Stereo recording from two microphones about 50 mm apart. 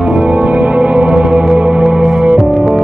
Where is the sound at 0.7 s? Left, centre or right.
Right.